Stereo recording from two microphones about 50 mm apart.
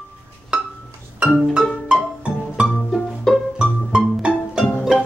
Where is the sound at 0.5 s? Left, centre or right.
Right.